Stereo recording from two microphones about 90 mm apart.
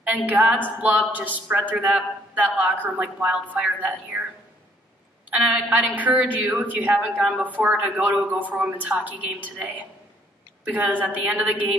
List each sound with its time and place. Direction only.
0.0 s a sound: 20° right (ahead or behind)
0.7 s speech: 15° right (ahead or behind)
5.3 s speech: 15° right (ahead or behind)